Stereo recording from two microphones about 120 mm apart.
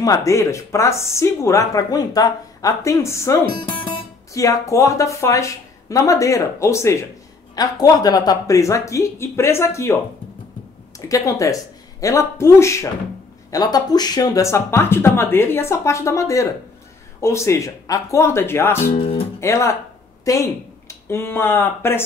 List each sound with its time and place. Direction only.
0.0 s speech: 25° left (ahead or behind)
11.0 s speech: 25° left (ahead or behind)
18.9 s music: 55° left (ahead or behind)
19.4 s speech: 25° left (ahead or behind)